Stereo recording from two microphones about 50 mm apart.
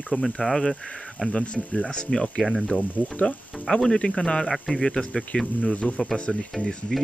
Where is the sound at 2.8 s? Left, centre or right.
Left.